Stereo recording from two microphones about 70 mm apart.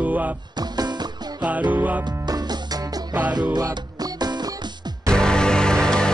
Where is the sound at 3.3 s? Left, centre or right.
Right.